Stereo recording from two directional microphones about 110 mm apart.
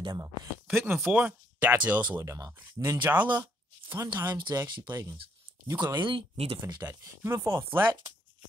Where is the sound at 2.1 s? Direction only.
30° right (ahead or behind).